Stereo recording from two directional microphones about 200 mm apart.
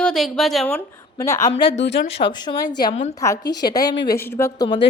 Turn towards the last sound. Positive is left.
turn(degrees=20)  # may be behind; listen again after turning